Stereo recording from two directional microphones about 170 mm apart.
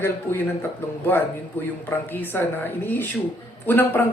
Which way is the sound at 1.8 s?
10° left (ahead or behind).